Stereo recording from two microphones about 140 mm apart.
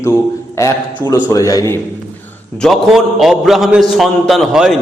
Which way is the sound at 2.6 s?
Centre (ahead or behind).